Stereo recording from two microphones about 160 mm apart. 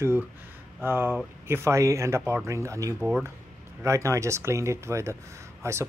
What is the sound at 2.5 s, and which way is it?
Speech, 20° right (ahead or behind).